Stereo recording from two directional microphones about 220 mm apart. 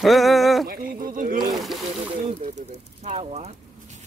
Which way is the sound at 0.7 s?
40° right (ahead or behind).